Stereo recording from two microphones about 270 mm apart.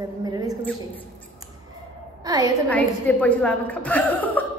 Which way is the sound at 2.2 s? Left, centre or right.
Centre.